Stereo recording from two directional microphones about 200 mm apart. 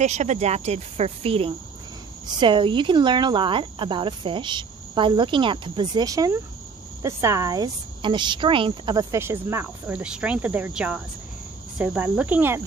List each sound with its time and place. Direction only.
0.0 s speech: 35° right (ahead or behind); by 12.6 s 10° right (ahead or behind)